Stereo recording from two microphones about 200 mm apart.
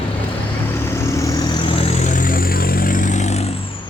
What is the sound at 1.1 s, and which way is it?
Vehicle, 15° left (ahead or behind).